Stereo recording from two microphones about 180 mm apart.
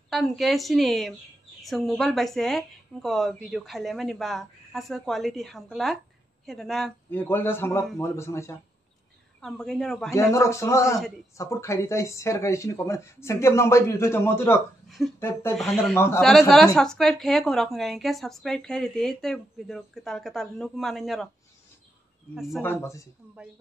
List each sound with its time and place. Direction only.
0.1 s a woman's voice: centre (ahead or behind); by 8.5 s 15° left (ahead or behind)
9.4 s a woman's voice: 5° left (ahead or behind)
10.3 s speech: 15° left (ahead or behind)
14.9 s speech: centre (ahead or behind)
15.1 s speech: 10° left (ahead or behind)
15.5 s a woman's voice: centre (ahead or behind)
15.9 s speech: 15° left (ahead or behind)
16.2 s a woman's voice: centre (ahead or behind)
22.3 s a woman's voice: centre (ahead or behind)
22.6 s speech: 15° left (ahead or behind)